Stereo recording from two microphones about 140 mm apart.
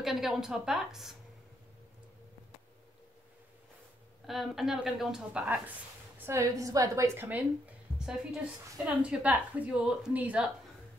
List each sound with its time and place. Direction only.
0.0 s a woman's voice: centre (ahead or behind)
4.3 s a woman's voice: centre (ahead or behind)
8.8 s a woman's voice: 10° right (ahead or behind)